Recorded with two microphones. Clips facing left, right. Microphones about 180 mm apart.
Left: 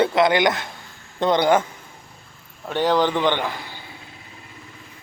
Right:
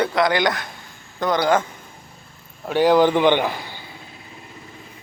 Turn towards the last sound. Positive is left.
turn(degrees=-15)  # may be behind; listen again after turning